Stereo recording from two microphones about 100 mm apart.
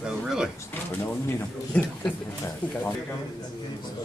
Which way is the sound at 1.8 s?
10° left (ahead or behind).